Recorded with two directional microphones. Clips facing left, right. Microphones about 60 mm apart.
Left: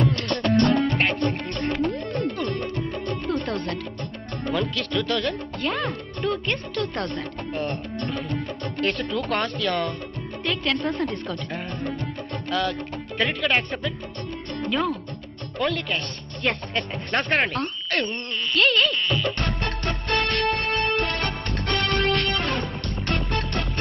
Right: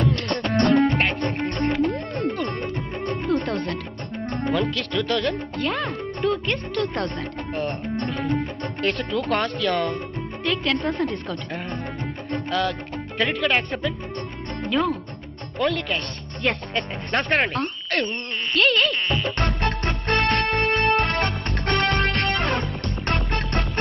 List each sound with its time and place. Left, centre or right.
0.3 s music: right
0.7 s music: centre
1.4 s music: right
1.9 s music: centre
3.4 s speech: centre
7.7 s music: right
8.8 s speech: centre
12.5 s music: centre
13.1 s speech: centre
18.1 s speech: right
18.5 s speech: centre
18.9 s music: right